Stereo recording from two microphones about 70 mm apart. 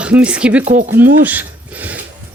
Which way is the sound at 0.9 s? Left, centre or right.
Right.